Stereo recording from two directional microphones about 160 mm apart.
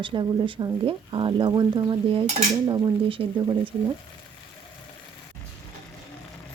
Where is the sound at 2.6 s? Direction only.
25° right (ahead or behind).